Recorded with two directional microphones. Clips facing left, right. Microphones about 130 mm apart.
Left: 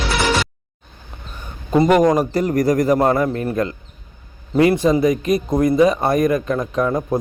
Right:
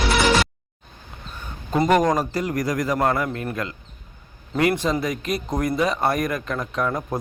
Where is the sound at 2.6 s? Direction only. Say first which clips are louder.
Left 7 dB; 30° left (ahead or behind).